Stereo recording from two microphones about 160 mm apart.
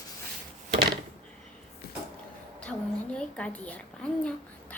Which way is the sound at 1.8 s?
75° left (ahead or behind).